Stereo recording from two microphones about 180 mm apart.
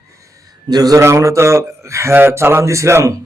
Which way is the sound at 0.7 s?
20° right (ahead or behind).